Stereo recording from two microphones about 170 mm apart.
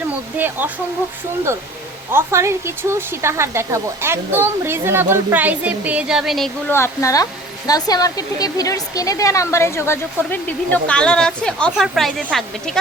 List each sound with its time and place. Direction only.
0.3 s speech: 10° right (ahead or behind)
2.1 s speech: 15° right (ahead or behind); by 6.5 s centre (ahead or behind)
6.7 s speech: 15° left (ahead or behind)